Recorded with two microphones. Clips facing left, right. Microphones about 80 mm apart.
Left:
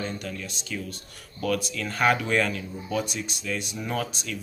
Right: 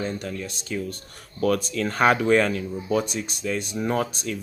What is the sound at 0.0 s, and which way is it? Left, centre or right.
Speech, right.